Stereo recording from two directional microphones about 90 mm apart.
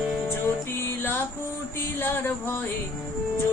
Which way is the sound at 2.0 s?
25° left (ahead or behind).